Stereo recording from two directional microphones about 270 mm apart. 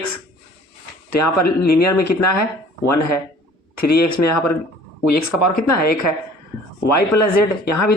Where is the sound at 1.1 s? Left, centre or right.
Left.